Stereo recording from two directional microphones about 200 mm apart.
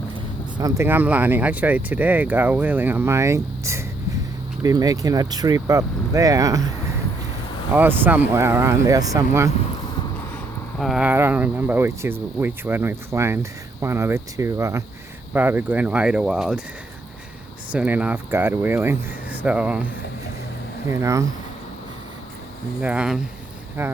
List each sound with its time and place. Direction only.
0.5 s speech: 15° right (ahead or behind)
7.7 s speech: 10° right (ahead or behind)
10.8 s speech: centre (ahead or behind)
17.7 s speech: 5° right (ahead or behind)
20.9 s speech: 15° right (ahead or behind)
22.8 s speech: 5° right (ahead or behind)
23.8 s speech: 15° right (ahead or behind)